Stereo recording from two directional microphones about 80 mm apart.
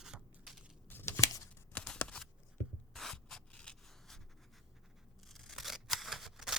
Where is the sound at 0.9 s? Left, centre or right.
Left.